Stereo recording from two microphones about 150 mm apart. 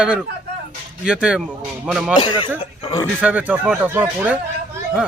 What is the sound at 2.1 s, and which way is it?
Speech, 30° left (ahead or behind).